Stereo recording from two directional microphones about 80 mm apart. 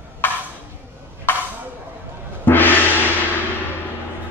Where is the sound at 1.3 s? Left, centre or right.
Left.